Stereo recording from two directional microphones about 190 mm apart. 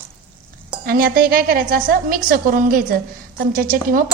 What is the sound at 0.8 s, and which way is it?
A woman's voice, 50° right (ahead or behind).